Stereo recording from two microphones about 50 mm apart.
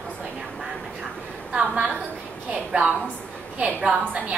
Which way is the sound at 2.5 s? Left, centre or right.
Right.